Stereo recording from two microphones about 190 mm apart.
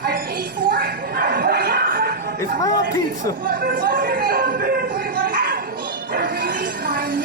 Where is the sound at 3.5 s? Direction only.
45° right (ahead or behind).